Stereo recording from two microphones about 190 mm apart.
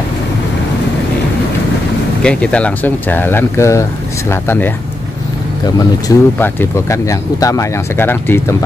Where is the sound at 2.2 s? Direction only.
5° left (ahead or behind).